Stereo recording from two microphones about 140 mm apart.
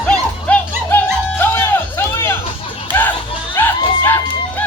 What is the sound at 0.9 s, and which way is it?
Music, 15° left (ahead or behind).